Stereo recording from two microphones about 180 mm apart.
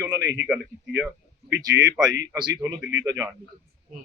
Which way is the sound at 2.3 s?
20° right (ahead or behind).